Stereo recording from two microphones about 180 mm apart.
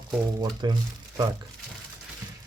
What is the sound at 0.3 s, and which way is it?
Speech, 25° right (ahead or behind).